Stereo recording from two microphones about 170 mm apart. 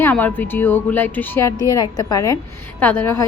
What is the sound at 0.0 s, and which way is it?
A woman's voice, 10° left (ahead or behind).